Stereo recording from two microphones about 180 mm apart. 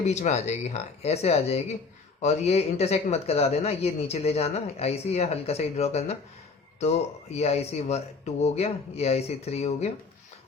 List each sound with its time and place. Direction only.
0.0 s speech: 40° left (ahead or behind)